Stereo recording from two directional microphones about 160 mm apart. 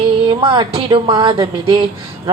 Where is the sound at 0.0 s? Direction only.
35° right (ahead or behind).